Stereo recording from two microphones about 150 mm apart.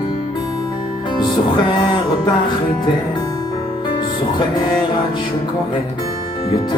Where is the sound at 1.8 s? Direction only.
30° left (ahead or behind).